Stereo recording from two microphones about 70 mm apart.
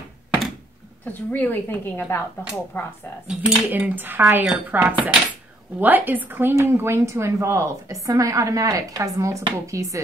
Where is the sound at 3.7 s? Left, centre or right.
Right.